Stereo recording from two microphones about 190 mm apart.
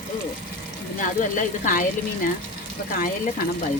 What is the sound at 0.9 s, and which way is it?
Speech, 45° left (ahead or behind).